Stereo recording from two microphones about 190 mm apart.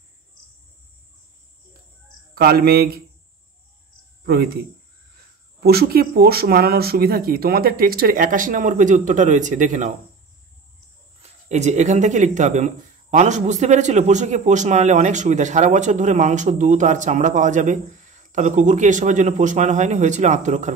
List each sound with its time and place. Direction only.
2.3 s speech: 55° right (ahead or behind)
4.2 s a sound: 55° right (ahead or behind)
5.6 s speech: 55° right (ahead or behind)
11.4 s a man's voice: 40° right (ahead or behind)